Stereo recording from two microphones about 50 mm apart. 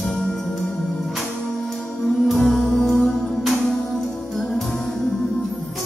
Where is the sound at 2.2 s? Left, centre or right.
Centre.